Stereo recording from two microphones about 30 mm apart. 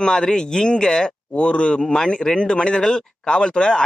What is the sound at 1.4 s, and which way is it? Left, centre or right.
Speech, left.